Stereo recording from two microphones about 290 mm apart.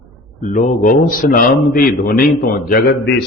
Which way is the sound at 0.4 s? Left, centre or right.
Left.